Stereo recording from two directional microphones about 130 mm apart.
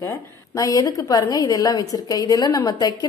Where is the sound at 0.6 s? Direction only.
25° left (ahead or behind).